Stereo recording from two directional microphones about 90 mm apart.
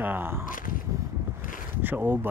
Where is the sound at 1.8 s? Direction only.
20° right (ahead or behind).